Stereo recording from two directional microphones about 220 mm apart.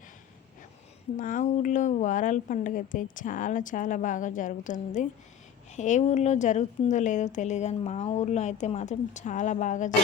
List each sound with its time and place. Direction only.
1.1 s a woman's voice: 35° left (ahead or behind)